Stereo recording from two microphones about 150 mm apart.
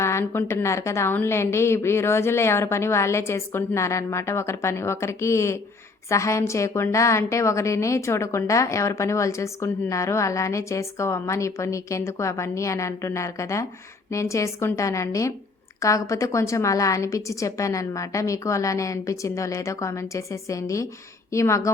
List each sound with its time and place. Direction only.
0.0 s a woman's voice: 20° left (ahead or behind)